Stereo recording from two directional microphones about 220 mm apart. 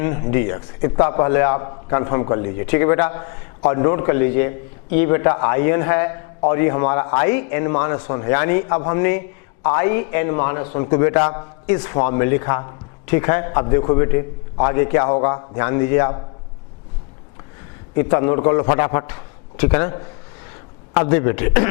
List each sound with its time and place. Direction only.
0.0 s a man's voice: 15° left (ahead or behind)
17.9 s a man's voice: 15° left (ahead or behind)